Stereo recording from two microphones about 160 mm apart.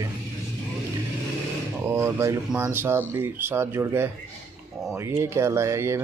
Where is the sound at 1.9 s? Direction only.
15° right (ahead or behind).